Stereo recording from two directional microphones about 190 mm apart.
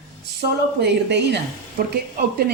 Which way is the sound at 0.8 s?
65° right (ahead or behind).